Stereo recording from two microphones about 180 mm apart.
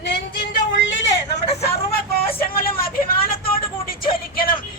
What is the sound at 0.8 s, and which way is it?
Vehicle, 90° left.